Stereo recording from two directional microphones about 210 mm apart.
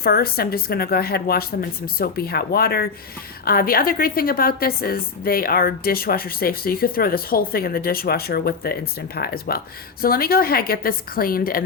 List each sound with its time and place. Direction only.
0.0 s a woman's voice: 45° left (ahead or behind)